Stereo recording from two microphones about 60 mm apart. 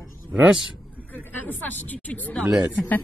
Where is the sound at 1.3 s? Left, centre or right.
Left.